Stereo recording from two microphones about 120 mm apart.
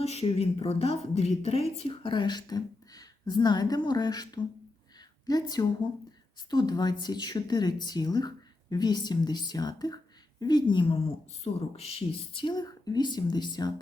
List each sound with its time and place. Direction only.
0.0 s a woman's voice: 60° left (ahead or behind); by 4.3 s 35° left (ahead or behind)
4.9 s a sound: 35° left (ahead or behind)
6.5 s speech: 35° left (ahead or behind)
11.4 s speech: 60° left (ahead or behind); by 13.7 s 35° left (ahead or behind)